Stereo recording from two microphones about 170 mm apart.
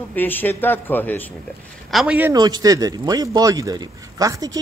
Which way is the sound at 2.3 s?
25° right (ahead or behind).